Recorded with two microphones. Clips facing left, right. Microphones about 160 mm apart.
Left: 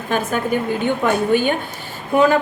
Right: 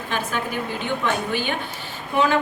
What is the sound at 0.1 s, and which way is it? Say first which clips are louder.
A woman's voice: left 7 dB; 45° left (ahead or behind).